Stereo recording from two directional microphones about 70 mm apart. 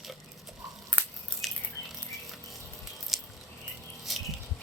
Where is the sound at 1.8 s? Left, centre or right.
Left.